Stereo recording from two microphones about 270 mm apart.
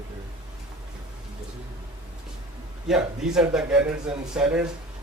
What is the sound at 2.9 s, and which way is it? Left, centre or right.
Speech, centre.